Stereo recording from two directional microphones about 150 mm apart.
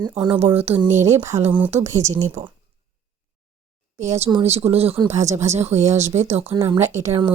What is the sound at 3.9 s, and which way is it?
Speech, 50° right (ahead or behind).